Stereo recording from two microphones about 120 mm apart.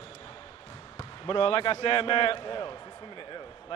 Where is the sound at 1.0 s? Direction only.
45° left (ahead or behind).